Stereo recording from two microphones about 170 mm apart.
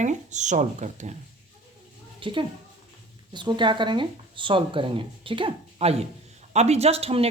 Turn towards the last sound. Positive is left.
turn(degrees=-35)  # may be behind; listen again after turning